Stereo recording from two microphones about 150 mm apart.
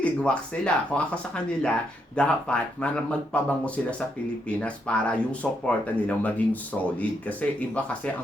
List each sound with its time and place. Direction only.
0.0 s speech: 5° left (ahead or behind)
4.4 s speech: 10° left (ahead or behind)